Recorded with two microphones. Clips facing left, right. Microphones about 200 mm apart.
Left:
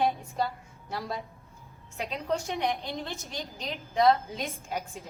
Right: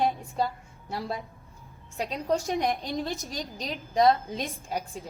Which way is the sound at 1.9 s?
40° right (ahead or behind).